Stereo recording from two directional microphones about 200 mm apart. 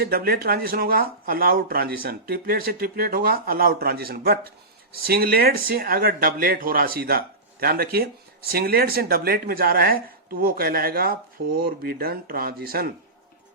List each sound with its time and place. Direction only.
0.0 s speech: 50° right (ahead or behind)